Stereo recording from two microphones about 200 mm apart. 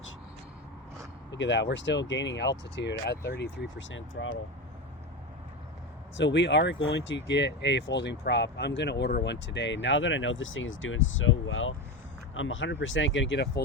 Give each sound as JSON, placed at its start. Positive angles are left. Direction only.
{"t": 1.3, "sound": "speech", "side_deg": 60}
{"t": 6.1, "sound": "speech", "side_deg": 60}